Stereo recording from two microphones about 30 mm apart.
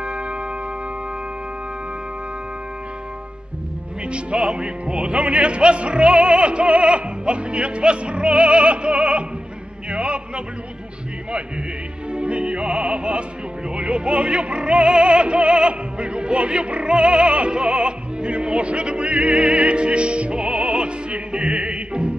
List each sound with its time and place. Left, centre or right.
0.0 s music: right
4.6 s music: right
9.8 s a sound: right
12.1 s music: right
16.9 s opera: right